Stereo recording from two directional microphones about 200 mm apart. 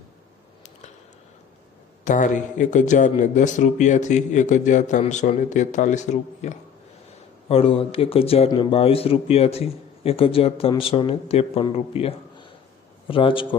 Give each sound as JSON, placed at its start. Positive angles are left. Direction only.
{"t": 2.0, "sound": "a man's voice", "side_deg": 40}